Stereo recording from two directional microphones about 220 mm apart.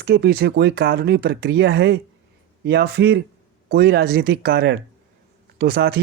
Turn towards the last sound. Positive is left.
turn(degrees=-45)  # may be behind; listen again after turning